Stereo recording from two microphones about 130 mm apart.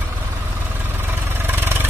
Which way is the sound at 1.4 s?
15° right (ahead or behind).